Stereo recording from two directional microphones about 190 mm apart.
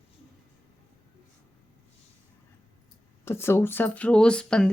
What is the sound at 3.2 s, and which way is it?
Speech, 15° left (ahead or behind).